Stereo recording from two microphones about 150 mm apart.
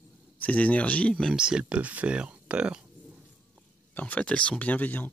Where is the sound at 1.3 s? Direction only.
5° right (ahead or behind).